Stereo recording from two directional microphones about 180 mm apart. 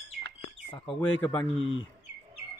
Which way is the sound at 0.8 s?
5° left (ahead or behind).